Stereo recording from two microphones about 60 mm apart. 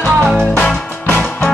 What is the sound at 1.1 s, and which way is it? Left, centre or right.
Music, left.